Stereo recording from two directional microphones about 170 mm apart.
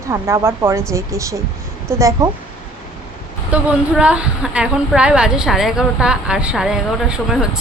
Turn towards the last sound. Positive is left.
turn(degrees=-5)  # may be behind; listen again after turning